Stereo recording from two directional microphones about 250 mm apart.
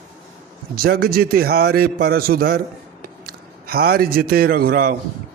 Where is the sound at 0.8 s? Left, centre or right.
Right.